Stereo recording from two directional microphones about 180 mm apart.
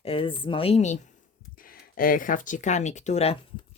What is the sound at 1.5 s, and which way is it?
Speech, 50° left (ahead or behind).